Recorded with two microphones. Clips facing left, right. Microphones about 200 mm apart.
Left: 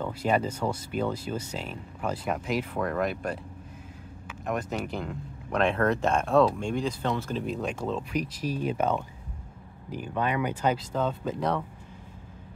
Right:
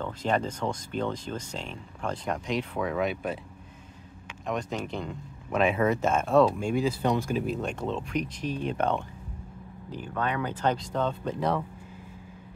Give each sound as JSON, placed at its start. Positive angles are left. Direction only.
{"t": 0.0, "sound": "speech", "side_deg": 10}
{"t": 4.5, "sound": "speech", "side_deg": 5}